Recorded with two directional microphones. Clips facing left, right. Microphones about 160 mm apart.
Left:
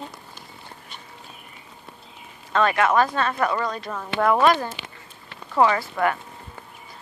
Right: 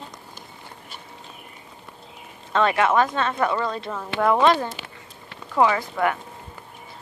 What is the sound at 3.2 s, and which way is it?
Speech, 20° right (ahead or behind).